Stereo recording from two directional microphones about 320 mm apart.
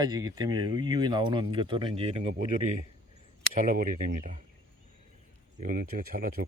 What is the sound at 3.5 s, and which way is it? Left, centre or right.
Speech, right.